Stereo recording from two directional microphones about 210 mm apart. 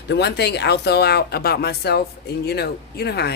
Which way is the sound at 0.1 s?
55° left (ahead or behind).